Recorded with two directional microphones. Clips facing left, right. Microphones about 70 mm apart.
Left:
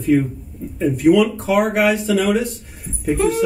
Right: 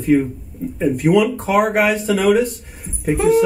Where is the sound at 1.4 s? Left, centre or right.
Right.